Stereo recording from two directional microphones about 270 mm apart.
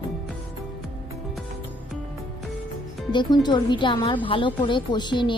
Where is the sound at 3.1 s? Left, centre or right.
Centre.